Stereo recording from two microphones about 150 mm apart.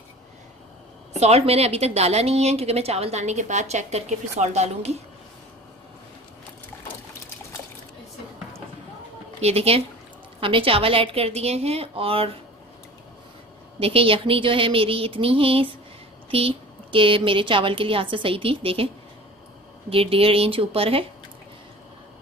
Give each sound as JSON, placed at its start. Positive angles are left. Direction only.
{"t": 1.1, "sound": "a woman's voice", "side_deg": -45}
{"t": 9.4, "sound": "a woman's voice", "side_deg": -45}
{"t": 13.7, "sound": "a woman's voice", "side_deg": -40}
{"t": 19.9, "sound": "a woman's voice", "side_deg": -40}